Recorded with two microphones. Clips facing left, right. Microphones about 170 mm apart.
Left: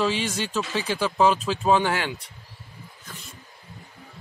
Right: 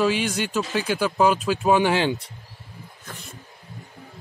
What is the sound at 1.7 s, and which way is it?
Speech, 20° right (ahead or behind).